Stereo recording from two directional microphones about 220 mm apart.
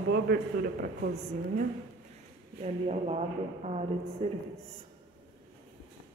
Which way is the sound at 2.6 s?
30° right (ahead or behind).